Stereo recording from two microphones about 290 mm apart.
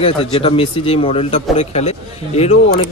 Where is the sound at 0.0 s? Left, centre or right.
Centre.